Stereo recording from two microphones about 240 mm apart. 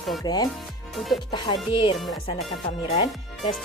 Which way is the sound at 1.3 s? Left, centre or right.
Centre.